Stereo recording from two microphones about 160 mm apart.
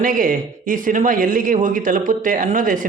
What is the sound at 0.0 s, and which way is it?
Speech, 60° right (ahead or behind).